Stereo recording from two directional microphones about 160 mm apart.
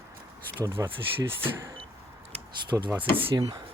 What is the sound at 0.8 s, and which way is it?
Speech, 30° right (ahead or behind).